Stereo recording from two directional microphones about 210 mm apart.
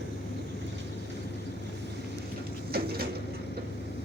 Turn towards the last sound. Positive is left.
turn(degrees=-50)  # may be behind; listen again after turning